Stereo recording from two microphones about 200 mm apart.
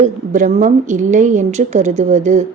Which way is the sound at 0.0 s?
35° right (ahead or behind).